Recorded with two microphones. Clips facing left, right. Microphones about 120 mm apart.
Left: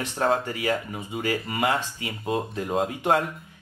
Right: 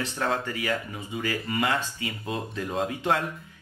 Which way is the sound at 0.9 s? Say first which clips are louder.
Left 3 dB; 20° left (ahead or behind).